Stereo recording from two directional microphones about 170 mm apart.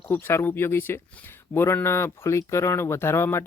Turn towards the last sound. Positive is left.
turn(degrees=15)  # may be behind; listen again after turning